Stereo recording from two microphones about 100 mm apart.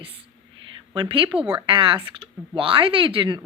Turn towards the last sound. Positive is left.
turn(degrees=-60)  # may be behind; listen again after turning